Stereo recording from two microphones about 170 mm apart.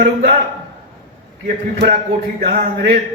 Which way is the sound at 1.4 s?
65° right (ahead or behind).